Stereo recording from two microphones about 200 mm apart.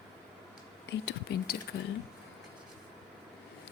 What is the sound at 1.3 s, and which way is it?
Speech, 55° left (ahead or behind).